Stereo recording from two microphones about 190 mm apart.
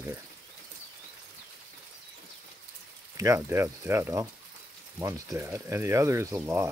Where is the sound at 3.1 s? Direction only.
15° right (ahead or behind).